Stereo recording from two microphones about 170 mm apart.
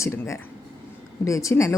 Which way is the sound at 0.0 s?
15° left (ahead or behind).